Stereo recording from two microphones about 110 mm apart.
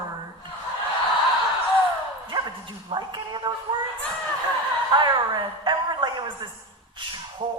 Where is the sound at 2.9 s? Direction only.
45° right (ahead or behind).